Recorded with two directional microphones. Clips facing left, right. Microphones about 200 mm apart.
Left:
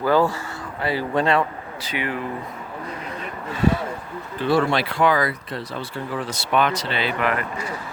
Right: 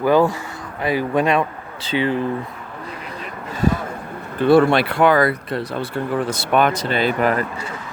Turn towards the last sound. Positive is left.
turn(degrees=-30)  # may be behind; listen again after turning